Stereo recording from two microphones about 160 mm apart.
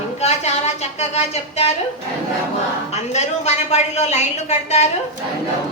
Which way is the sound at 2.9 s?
45° left (ahead or behind).